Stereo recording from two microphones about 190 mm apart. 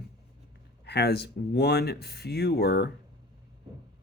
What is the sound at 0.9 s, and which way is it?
Speech, 60° left (ahead or behind).